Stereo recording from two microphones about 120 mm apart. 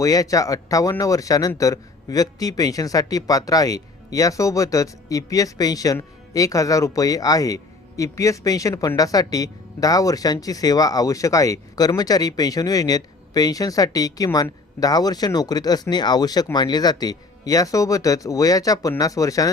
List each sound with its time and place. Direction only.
0.0 s speech: 30° left (ahead or behind)